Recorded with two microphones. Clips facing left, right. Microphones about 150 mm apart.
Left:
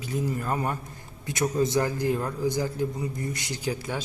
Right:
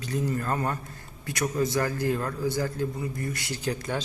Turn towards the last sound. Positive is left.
turn(degrees=10)  # may be behind; listen again after turning